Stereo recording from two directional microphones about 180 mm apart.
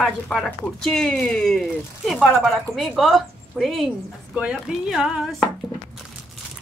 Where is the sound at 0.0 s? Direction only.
Centre (ahead or behind).